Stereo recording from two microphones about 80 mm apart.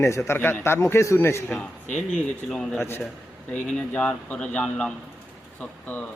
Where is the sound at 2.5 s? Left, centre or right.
Centre.